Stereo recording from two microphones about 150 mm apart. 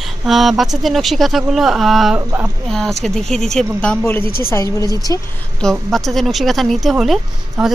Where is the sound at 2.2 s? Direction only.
20° right (ahead or behind).